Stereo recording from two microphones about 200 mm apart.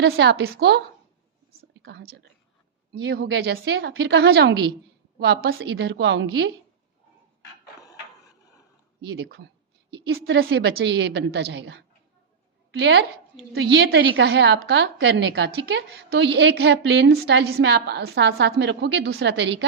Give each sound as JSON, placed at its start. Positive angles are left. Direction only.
{"t": 0.0, "sound": "a woman's voice", "side_deg": -60}
{"t": 1.8, "sound": "a woman's voice", "side_deg": -55}
{"t": 9.0, "sound": "a woman's voice", "side_deg": -55}